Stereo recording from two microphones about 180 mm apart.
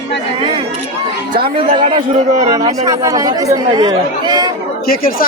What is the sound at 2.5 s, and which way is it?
Speech, 20° right (ahead or behind).